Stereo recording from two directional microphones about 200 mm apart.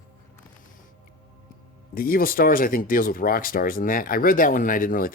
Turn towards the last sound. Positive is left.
turn(degrees=45)  # may be behind; listen again after turning